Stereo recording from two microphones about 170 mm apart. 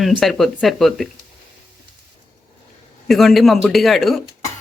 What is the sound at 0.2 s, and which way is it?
Speech, centre (ahead or behind).